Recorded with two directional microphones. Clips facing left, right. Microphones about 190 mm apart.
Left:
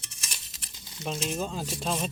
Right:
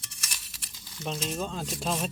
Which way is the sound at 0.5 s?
20° left (ahead or behind).